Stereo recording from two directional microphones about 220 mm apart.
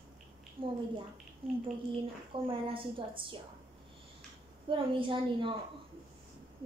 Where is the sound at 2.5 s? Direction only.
25° right (ahead or behind).